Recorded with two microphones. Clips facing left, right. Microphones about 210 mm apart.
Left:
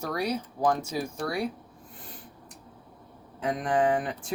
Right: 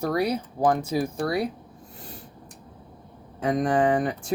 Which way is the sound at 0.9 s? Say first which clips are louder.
Right 6 dB; 30° right (ahead or behind).